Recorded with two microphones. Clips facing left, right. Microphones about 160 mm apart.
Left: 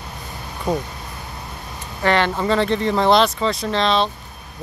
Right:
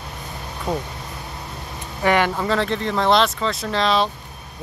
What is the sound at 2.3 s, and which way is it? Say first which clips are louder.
Speech: left 3 dB; centre (ahead or behind).